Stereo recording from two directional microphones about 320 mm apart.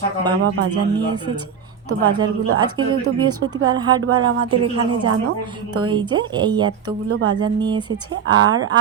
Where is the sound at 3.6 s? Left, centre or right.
Centre.